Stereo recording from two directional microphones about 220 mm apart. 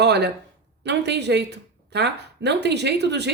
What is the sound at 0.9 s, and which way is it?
A woman's voice, 50° right (ahead or behind).